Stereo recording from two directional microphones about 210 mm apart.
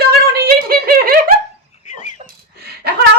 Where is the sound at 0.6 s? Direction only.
45° right (ahead or behind).